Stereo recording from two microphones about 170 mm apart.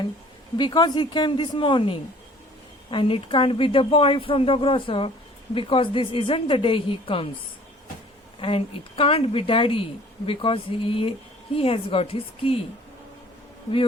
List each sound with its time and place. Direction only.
0.5 s a woman's voice: 25° left (ahead or behind)
8.4 s speech: 30° left (ahead or behind)